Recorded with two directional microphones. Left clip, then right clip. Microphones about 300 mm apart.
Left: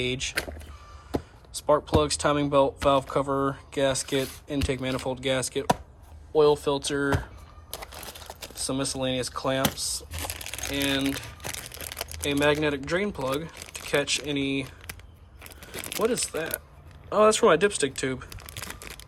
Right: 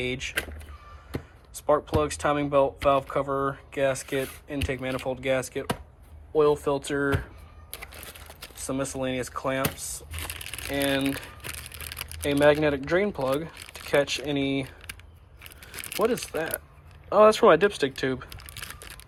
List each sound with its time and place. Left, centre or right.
0.0 s speech: centre
1.6 s speech: centre
8.6 s speech: centre
10.1 s a sound: centre
10.7 s speech: centre
11.9 s typing: centre
12.3 s speech: centre
15.7 s a sound: centre
16.3 s speech: centre
18.3 s crumpling: centre